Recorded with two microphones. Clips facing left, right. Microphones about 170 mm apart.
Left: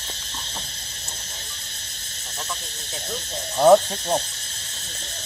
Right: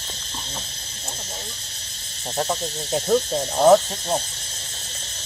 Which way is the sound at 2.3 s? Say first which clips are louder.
Right 10 dB; 60° right (ahead or behind).